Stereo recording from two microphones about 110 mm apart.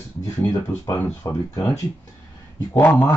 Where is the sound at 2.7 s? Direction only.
20° left (ahead or behind).